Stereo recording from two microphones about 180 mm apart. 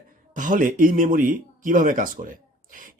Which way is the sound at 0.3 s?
45° right (ahead or behind).